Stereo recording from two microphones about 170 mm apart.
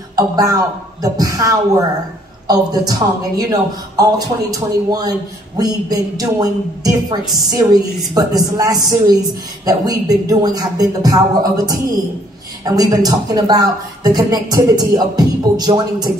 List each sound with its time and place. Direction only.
0.1 s speech: 20° right (ahead or behind)